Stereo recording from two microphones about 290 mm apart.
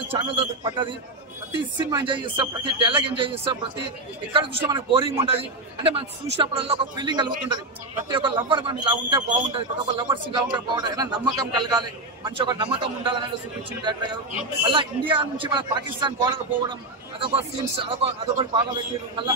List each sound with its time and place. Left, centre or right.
0.1 s a man's voice: centre
1.9 s a man's voice: centre
14.6 s a man's voice: centre